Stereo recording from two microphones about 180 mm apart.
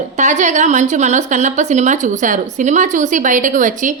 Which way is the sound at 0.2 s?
40° right (ahead or behind).